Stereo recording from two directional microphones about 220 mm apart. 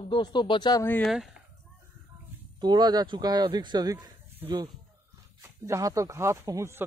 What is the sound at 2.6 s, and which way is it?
Speech, 20° right (ahead or behind).